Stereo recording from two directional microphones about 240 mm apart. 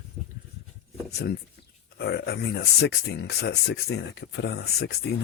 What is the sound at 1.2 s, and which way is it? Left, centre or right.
Speech, left.